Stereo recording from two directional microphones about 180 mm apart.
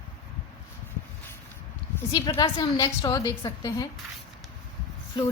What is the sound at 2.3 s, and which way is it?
A woman's voice, 20° left (ahead or behind).